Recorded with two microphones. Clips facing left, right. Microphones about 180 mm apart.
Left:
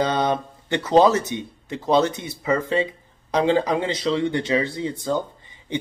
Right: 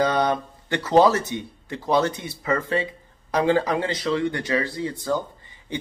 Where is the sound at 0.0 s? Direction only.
20° left (ahead or behind).